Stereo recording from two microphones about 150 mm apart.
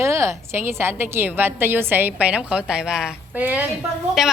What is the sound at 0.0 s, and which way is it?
A woman's voice, 20° right (ahead or behind).